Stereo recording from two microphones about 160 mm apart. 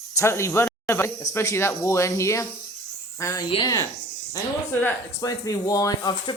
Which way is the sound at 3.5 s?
25° left (ahead or behind).